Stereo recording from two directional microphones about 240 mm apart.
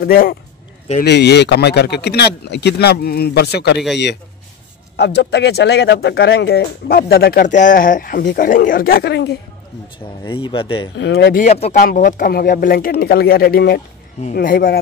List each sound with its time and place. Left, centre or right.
0.0 s speech: left
4.9 s speech: left
10.2 s speech: left
11.0 s speech: left
11.4 s speech: left